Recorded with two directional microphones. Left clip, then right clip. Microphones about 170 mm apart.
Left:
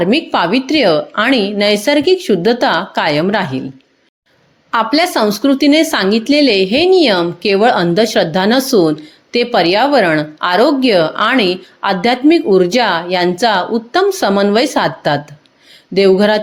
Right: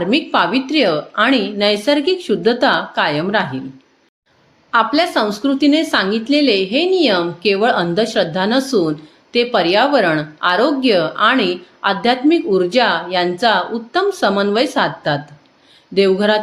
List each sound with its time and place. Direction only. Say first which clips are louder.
0.0 s speech: left 2 dB; 40° left (ahead or behind)
4.7 s speech: left 1 dB; 50° left (ahead or behind)